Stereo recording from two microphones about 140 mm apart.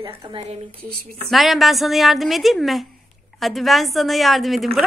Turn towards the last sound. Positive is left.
turn(degrees=0)  # may be behind; listen again after turning